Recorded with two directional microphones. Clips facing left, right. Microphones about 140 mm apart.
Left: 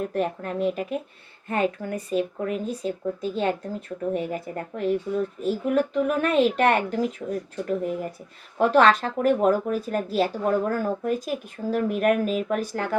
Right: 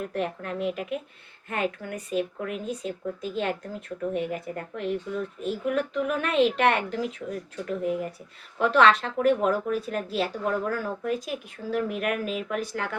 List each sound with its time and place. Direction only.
0.0 s speech: 40° left (ahead or behind)